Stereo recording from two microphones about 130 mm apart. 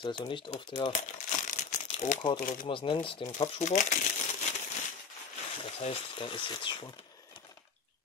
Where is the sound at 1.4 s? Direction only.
75° left (ahead or behind).